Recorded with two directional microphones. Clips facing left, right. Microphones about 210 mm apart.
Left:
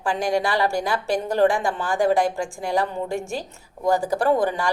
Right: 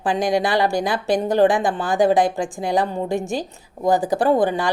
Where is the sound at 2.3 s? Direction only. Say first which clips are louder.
Right 3 dB; 20° right (ahead or behind).